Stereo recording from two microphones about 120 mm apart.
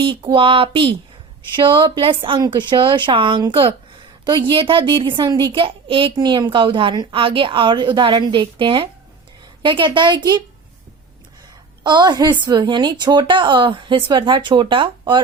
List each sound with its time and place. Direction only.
0.0 s a woman's voice: 45° right (ahead or behind)
6.1 s a woman's voice: 35° right (ahead or behind)
11.8 s a woman's voice: 40° right (ahead or behind)